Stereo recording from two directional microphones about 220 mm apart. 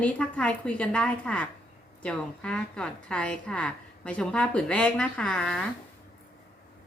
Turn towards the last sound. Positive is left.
turn(degrees=5)  # may be behind; listen again after turning